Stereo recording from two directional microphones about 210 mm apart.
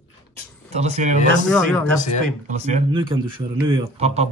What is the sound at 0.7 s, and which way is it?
Speech, 30° right (ahead or behind).